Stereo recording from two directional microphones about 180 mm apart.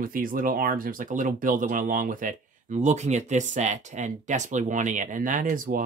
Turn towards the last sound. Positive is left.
turn(degrees=-50)  # may be behind; listen again after turning